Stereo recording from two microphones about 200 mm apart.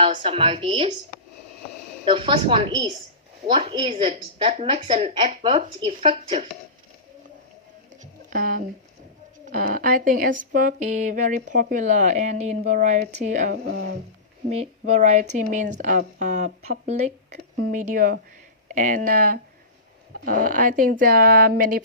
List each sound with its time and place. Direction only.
0.1 s a woman's voice: 30° right (ahead or behind)
2.0 s a woman's voice: 25° right (ahead or behind)
8.3 s speech: 45° right (ahead or behind)